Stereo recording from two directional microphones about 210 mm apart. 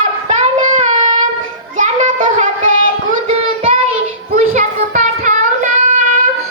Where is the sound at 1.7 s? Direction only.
35° right (ahead or behind).